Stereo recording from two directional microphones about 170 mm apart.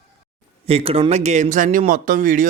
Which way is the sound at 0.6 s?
35° right (ahead or behind).